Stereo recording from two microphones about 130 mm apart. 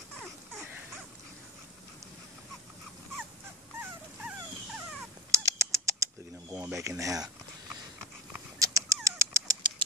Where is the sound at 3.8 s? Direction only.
10° right (ahead or behind).